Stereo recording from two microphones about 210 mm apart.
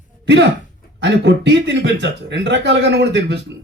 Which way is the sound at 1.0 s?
55° right (ahead or behind).